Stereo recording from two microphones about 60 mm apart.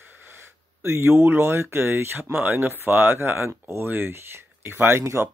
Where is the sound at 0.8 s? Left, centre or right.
Right.